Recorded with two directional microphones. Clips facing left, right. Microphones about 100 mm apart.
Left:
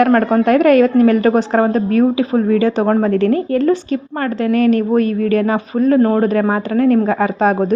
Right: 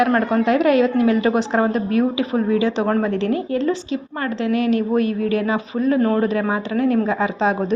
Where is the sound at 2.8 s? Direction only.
30° left (ahead or behind).